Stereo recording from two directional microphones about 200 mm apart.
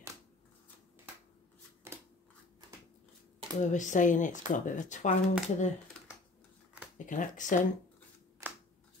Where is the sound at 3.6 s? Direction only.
40° left (ahead or behind).